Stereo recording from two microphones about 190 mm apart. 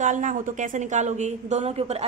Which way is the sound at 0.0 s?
40° right (ahead or behind).